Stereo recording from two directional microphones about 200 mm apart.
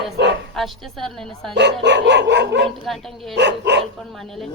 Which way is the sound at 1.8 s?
60° right (ahead or behind).